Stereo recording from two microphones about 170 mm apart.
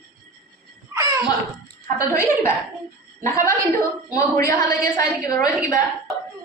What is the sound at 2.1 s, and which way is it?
A woman's voice, 15° left (ahead or behind).